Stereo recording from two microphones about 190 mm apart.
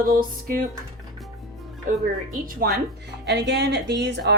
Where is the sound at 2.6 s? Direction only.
50° right (ahead or behind).